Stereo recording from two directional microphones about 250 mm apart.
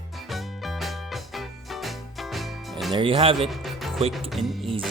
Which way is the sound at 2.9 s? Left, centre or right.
Right.